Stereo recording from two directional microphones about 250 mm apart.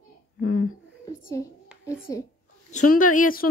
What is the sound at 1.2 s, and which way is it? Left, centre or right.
Speech, centre.